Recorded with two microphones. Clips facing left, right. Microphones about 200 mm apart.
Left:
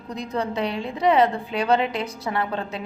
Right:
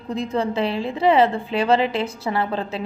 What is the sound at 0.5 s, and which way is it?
A woman's voice, centre (ahead or behind).